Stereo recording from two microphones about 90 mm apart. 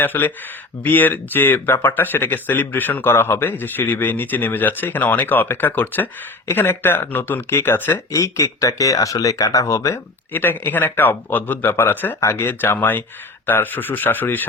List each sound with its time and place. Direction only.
0.0 s speech: 20° left (ahead or behind)
8.1 s speech: 35° left (ahead or behind)
10.3 s speech: 20° left (ahead or behind)